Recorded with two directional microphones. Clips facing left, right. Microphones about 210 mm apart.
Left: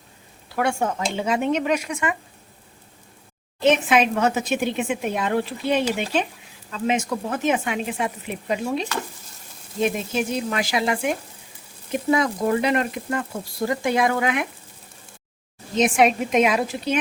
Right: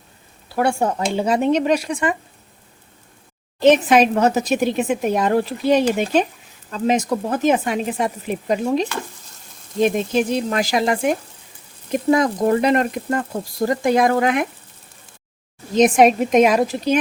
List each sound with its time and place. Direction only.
0.4 s speech: 35° right (ahead or behind)
3.6 s speech: 35° right (ahead or behind)
15.7 s speech: 40° right (ahead or behind)